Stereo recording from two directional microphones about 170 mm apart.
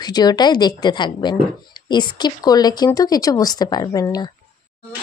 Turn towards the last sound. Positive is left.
turn(degrees=20)  # may be behind; listen again after turning